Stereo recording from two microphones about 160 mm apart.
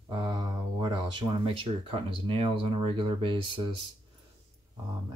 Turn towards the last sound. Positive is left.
turn(degrees=-30)  # may be behind; listen again after turning